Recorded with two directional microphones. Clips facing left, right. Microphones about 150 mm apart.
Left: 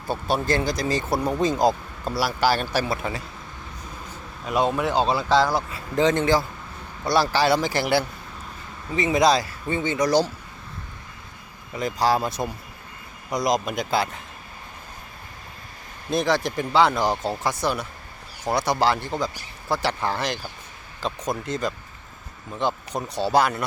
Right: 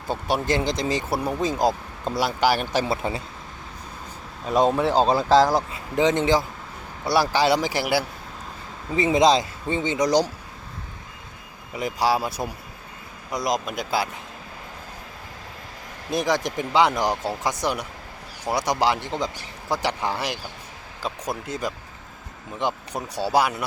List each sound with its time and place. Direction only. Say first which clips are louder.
0.1 s a man's voice: even; 15° right (ahead or behind)
1.1 s speech: left 2 dB; 5° right (ahead or behind)
2.0 s speech: right 1 dB; 20° right (ahead or behind)
4.4 s speech: right 3 dB; 35° right (ahead or behind)
5.7 s a man's voice: even; 15° right (ahead or behind)
9.0 s speech: right 1 dB; 25° right (ahead or behind)
11.7 s a man's voice: left 1 dB; 10° right (ahead or behind)
16.0 s a man's voice: left 1 dB; 15° right (ahead or behind)